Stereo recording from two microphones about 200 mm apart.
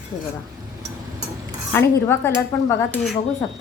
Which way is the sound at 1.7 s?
10° left (ahead or behind).